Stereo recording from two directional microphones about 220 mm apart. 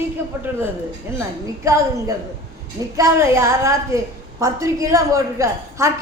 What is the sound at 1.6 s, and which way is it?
A woman's voice, 15° right (ahead or behind).